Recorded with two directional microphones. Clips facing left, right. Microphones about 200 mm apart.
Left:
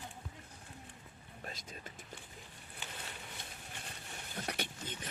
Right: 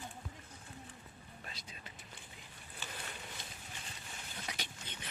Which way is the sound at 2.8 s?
15° left (ahead or behind).